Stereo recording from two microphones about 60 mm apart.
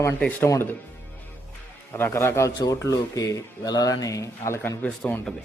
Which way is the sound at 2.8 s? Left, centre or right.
Left.